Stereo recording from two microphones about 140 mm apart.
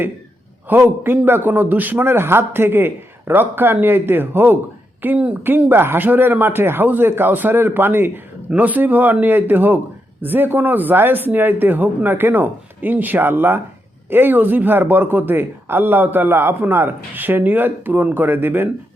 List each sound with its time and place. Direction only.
0.7 s speech: 15° right (ahead or behind)